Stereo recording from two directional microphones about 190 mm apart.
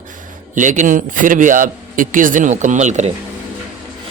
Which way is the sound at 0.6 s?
40° right (ahead or behind).